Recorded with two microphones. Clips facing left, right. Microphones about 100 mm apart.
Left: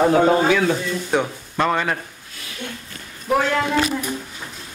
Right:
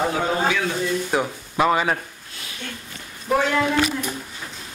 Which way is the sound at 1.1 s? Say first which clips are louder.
Left 1 dB; 5° right (ahead or behind).